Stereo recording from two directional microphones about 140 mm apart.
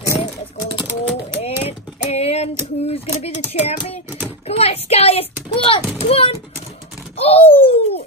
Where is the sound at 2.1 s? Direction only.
50° left (ahead or behind).